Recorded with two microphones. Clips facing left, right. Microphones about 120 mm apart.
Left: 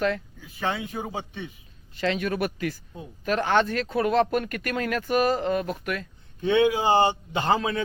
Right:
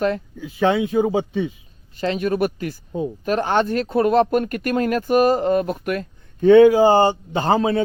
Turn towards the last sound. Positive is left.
turn(degrees=-35)  # may be behind; listen again after turning